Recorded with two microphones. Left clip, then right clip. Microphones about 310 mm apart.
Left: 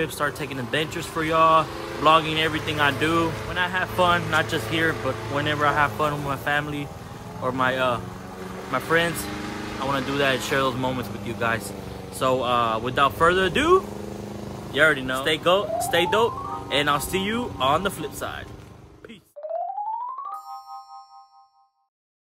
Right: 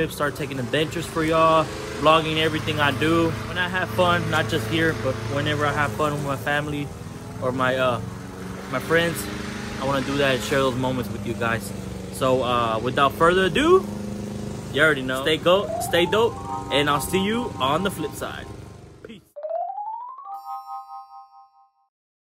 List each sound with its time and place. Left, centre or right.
0.0 s speech: centre
3.3 s speech: left
3.5 s speech: centre
4.9 s speech: left
5.3 s speech: centre
9.3 s vehicle: left
9.8 s speech: centre
19.4 s music: centre